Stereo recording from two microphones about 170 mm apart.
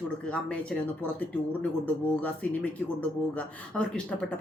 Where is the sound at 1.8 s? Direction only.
10° left (ahead or behind).